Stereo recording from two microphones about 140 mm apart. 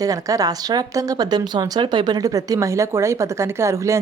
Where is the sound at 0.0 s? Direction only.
25° right (ahead or behind).